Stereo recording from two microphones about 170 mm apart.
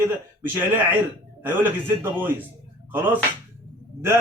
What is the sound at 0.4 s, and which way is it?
A man's voice, 10° right (ahead or behind).